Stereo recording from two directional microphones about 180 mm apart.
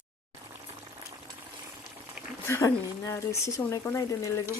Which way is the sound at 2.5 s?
15° left (ahead or behind).